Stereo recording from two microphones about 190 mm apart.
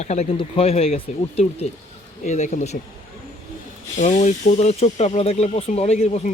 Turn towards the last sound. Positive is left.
turn(degrees=35)  # may be behind; listen again after turning